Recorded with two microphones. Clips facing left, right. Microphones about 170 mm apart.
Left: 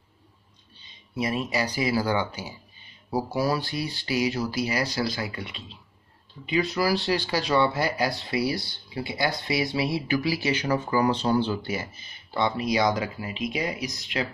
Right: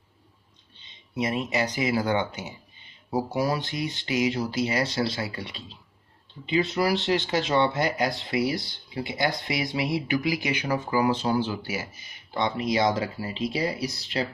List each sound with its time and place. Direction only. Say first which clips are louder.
0.7 s speech: right 1 dB; 20° right (ahead or behind)
12.4 s speech: even; 20° right (ahead or behind)